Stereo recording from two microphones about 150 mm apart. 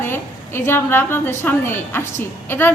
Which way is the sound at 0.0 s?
15° left (ahead or behind).